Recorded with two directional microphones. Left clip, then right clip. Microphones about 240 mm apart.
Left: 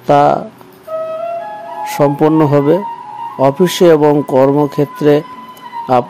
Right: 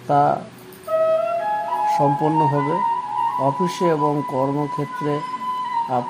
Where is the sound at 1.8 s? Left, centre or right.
Left.